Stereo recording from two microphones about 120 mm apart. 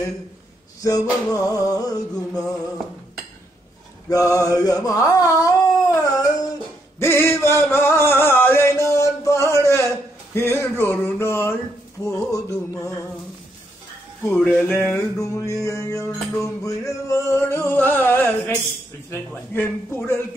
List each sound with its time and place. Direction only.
0.8 s a sound: 30° left (ahead or behind)
4.1 s music: 30° left (ahead or behind)
4.6 s speech: 30° left (ahead or behind)
7.0 s a sound: 20° left (ahead or behind)
14.2 s a man's voice: 10° left (ahead or behind)
14.7 s music: 20° left (ahead or behind)
19.0 s a man's voice: 15° left (ahead or behind)